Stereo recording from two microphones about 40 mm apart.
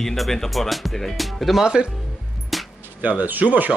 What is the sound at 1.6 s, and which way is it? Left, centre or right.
Speech, centre.